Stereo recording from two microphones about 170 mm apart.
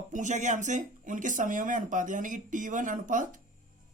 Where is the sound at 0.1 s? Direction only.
45° right (ahead or behind).